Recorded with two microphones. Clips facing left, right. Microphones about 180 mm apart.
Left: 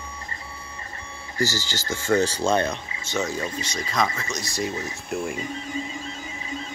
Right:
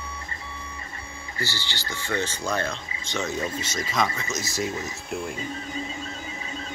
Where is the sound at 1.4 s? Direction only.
40° left (ahead or behind).